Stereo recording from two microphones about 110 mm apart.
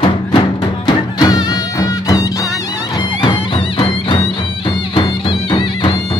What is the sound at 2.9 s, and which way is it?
Music, 50° left (ahead or behind).